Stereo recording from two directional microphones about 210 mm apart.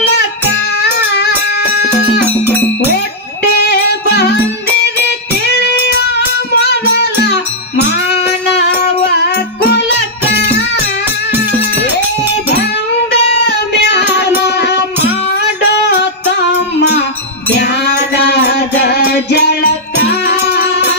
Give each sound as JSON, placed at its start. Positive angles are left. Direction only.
{"t": 7.7, "sound": "music", "side_deg": 55}
{"t": 9.1, "sound": "music", "side_deg": 50}
{"t": 17.6, "sound": "music", "side_deg": 50}